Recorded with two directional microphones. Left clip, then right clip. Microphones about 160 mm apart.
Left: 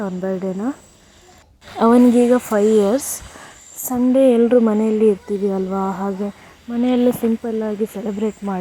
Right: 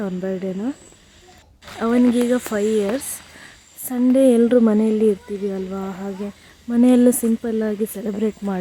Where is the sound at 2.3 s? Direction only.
5° right (ahead or behind).